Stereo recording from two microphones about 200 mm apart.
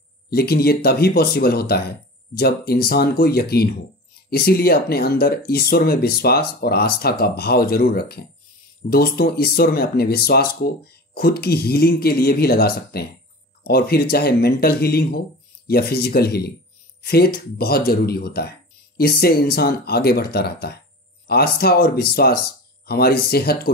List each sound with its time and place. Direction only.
0.3 s speech: 50° left (ahead or behind)